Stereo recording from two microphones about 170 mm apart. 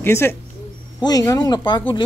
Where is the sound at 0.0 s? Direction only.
15° left (ahead or behind).